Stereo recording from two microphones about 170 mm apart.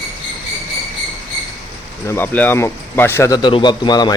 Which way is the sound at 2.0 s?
10° left (ahead or behind).